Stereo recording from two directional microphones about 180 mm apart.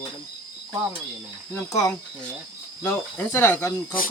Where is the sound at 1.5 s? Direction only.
15° left (ahead or behind).